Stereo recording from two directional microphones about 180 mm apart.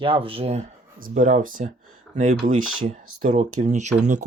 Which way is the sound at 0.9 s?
50° right (ahead or behind).